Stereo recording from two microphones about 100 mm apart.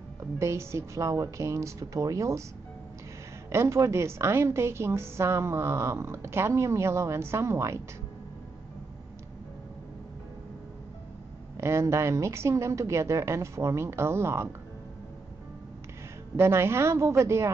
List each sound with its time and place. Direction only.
0.4 s a woman's voice: 30° right (ahead or behind)
3.5 s a woman's voice: 30° right (ahead or behind)
11.5 s a woman's voice: 30° right (ahead or behind)
16.3 s a woman's voice: 25° right (ahead or behind)